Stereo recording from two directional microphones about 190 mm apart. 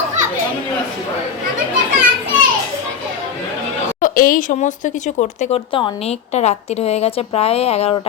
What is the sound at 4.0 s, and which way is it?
Speech, 45° left (ahead or behind).